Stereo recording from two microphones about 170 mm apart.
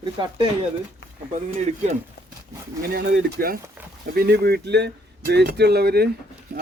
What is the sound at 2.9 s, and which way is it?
Speech, 75° right (ahead or behind).